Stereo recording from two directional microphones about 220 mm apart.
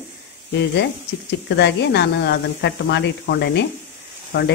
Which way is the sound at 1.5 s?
50° left (ahead or behind).